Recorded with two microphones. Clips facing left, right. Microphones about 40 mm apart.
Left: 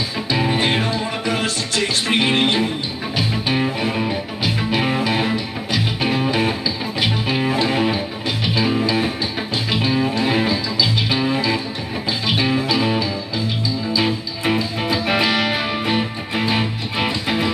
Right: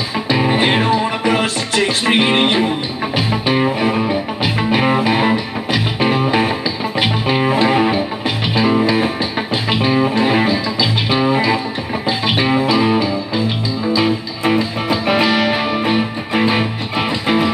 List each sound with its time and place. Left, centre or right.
0.3 s music: right
12.8 s music: centre
16.3 s music: centre